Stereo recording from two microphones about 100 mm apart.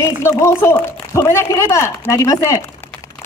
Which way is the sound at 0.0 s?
30° left (ahead or behind).